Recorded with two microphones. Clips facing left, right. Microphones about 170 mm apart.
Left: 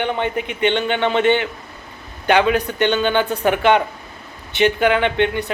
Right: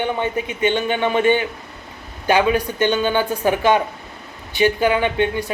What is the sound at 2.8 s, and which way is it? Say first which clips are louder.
Speech: left 1 dB; 10° right (ahead or behind).